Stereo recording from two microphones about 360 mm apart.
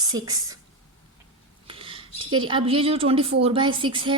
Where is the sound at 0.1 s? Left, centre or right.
Centre.